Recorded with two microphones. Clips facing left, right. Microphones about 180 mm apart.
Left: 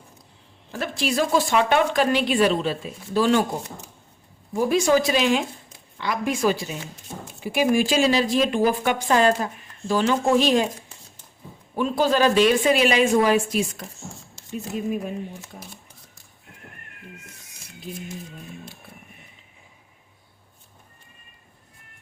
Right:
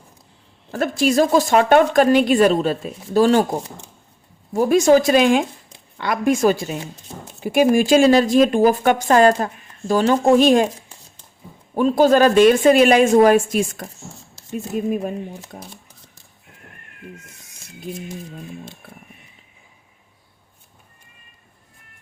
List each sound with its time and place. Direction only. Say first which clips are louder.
0.7 s speech: right 7 dB; 45° right (ahead or behind)
11.7 s speech: right 7 dB; 45° right (ahead or behind)